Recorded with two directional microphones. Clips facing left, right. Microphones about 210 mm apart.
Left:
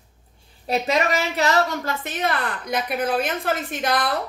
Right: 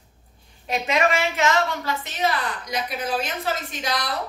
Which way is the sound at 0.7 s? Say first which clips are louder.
Left 1 dB; 40° left (ahead or behind).